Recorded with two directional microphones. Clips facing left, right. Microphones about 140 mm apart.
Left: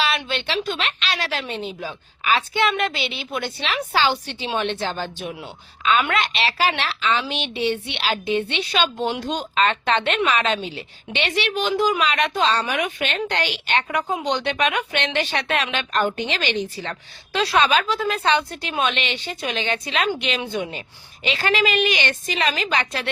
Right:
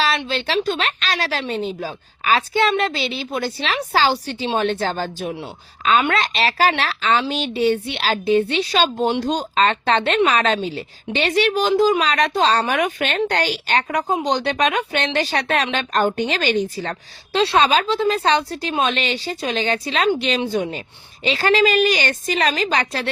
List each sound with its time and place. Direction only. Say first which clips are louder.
0.2 s a woman's voice: right 4 dB; 35° right (ahead or behind)